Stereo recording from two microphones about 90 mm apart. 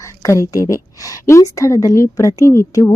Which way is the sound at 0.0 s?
35° left (ahead or behind).